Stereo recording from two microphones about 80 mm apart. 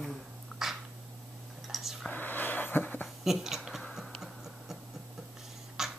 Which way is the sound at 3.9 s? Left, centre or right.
Centre.